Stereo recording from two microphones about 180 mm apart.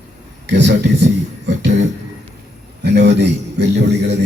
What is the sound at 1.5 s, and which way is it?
Music, 80° right.